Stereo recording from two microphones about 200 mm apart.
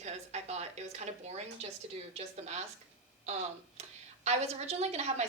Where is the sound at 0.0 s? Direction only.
35° right (ahead or behind).